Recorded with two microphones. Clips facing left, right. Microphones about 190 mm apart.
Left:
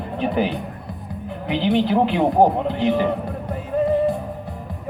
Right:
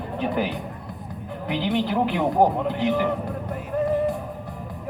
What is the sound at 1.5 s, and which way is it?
A man's voice, 25° left (ahead or behind).